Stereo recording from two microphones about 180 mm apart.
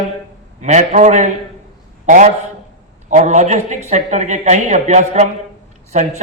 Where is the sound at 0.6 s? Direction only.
40° right (ahead or behind).